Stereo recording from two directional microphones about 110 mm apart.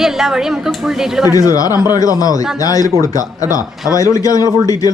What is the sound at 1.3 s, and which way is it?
Speech, 35° left (ahead or behind).